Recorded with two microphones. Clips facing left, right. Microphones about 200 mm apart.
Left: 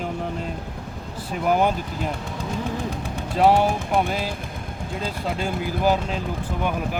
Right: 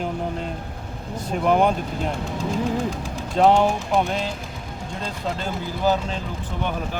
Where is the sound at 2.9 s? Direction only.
60° left (ahead or behind).